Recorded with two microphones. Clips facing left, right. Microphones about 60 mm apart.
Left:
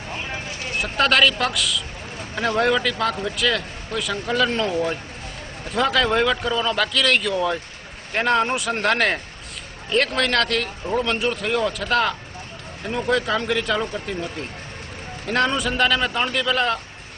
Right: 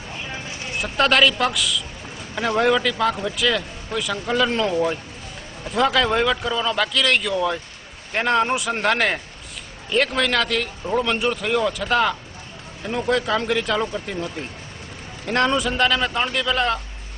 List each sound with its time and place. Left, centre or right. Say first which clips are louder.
0.8 s speech: right 1 dB; centre
15.3 s speech: right 1 dB; centre